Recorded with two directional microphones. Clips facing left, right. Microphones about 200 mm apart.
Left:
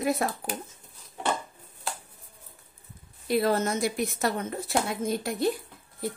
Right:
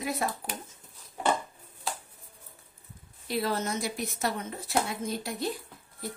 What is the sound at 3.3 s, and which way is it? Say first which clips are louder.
A woman's voice: left 5 dB; 50° left (ahead or behind).